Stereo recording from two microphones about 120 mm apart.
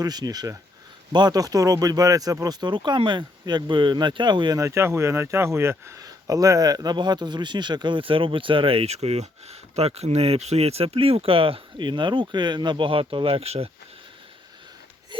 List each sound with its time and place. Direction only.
0.0 s speech: 35° right (ahead or behind); by 13.7 s 55° right (ahead or behind)
15.1 s sniff: 45° right (ahead or behind)